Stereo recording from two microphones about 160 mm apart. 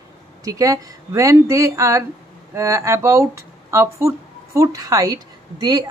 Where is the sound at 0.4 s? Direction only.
20° right (ahead or behind).